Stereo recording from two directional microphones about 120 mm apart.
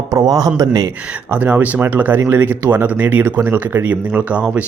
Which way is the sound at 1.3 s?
15° right (ahead or behind).